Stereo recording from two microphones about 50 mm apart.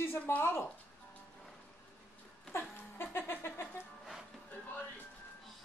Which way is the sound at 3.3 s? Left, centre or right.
Left.